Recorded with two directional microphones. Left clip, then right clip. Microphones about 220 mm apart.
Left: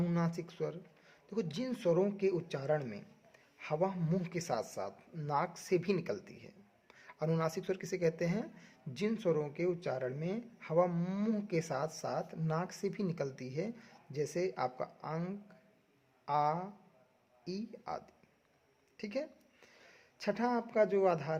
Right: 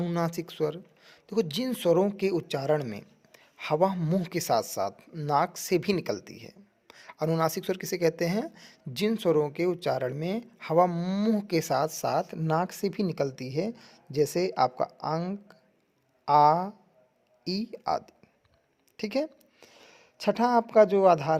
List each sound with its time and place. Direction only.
0.0 s a woman's voice: 35° right (ahead or behind)